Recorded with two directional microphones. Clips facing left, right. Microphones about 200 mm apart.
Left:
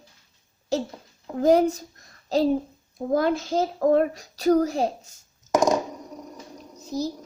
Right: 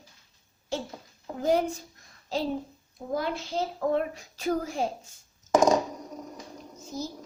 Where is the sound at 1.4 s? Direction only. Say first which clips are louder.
Left 7 dB; 40° left (ahead or behind).